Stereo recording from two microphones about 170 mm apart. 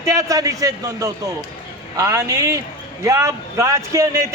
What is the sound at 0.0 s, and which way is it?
A man's voice, 20° right (ahead or behind).